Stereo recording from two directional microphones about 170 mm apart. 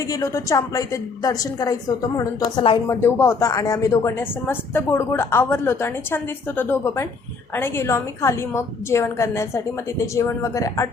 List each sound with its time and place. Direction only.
0.1 s a woman's voice: 20° left (ahead or behind)